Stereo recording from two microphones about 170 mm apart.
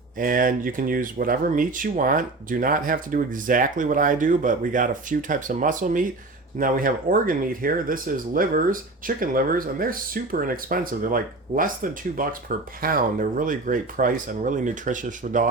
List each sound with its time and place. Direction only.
0.2 s speech: 55° right (ahead or behind)